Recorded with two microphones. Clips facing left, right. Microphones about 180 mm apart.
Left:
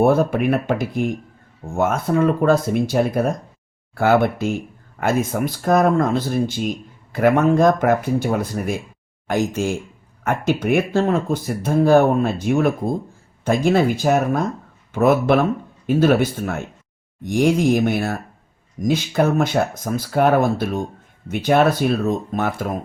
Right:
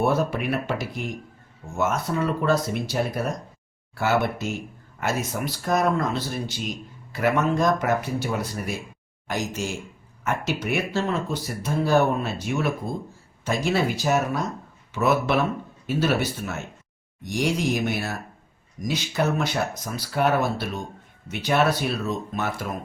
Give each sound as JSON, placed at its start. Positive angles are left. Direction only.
{"t": 0.0, "sound": "speech", "side_deg": 55}